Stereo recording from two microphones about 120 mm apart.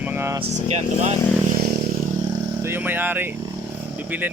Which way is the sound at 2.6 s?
20° right (ahead or behind).